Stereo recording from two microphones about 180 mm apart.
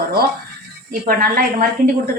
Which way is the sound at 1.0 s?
55° right (ahead or behind).